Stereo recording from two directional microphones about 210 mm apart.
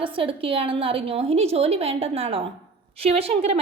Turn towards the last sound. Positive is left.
turn(degrees=-30)  # may be behind; listen again after turning